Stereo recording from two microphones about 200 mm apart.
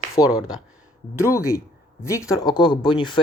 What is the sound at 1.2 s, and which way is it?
Speech, 15° left (ahead or behind).